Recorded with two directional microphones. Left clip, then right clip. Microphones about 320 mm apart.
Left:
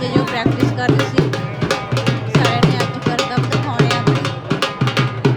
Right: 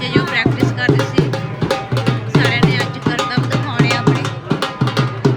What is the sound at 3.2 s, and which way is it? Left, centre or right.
Music, centre.